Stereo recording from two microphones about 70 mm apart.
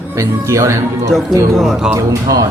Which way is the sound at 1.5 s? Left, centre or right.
Centre.